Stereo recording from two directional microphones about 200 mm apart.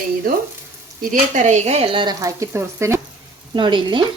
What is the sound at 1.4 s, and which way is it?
Speech, 35° right (ahead or behind).